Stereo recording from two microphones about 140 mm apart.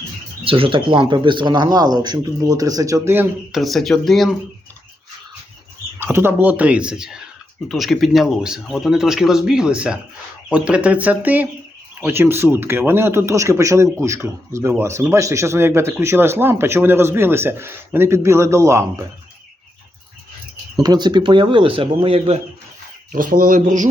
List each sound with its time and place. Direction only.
0.4 s speech: 40° right (ahead or behind); by 3.2 s 15° right (ahead or behind)
3.5 s speech: centre (ahead or behind)
6.0 s speech: 15° right (ahead or behind)
20.7 s speech: 30° right (ahead or behind)
23.1 s speech: 85° right; by 23.9 s 65° right (ahead or behind)